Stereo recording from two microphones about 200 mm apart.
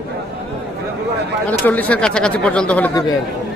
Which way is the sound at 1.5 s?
10° left (ahead or behind).